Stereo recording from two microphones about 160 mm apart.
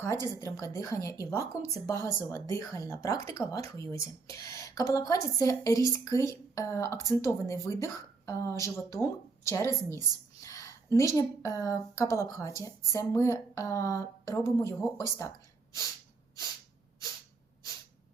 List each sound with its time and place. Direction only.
0.0 s a woman's voice: 15° left (ahead or behind)